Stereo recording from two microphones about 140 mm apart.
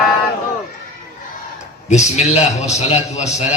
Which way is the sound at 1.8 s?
55° left (ahead or behind).